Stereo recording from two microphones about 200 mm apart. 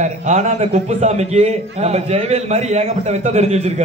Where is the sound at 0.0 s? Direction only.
35° right (ahead or behind).